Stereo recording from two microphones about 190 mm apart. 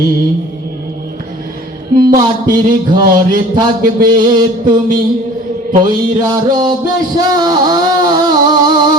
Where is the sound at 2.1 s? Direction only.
20° right (ahead or behind).